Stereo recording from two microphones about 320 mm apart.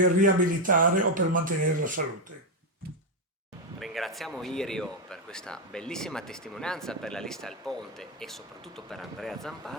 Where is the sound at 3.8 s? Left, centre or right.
Centre.